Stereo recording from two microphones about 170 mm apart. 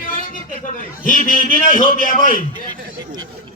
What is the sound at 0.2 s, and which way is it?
A man's voice, 55° left (ahead or behind).